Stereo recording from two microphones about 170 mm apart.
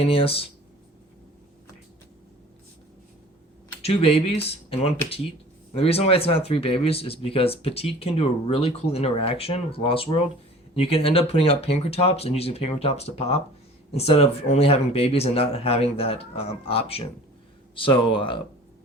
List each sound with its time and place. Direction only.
0.0 s speech: 35° left (ahead or behind)
3.8 s speech: 35° left (ahead or behind)